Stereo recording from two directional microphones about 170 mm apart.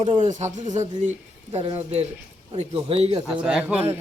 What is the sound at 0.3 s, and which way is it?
A man's voice, 45° right (ahead or behind).